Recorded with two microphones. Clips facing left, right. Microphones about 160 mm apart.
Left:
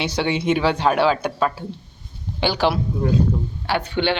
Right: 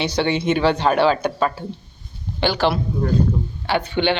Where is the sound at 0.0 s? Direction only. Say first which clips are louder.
Right 2 dB; 5° left (ahead or behind).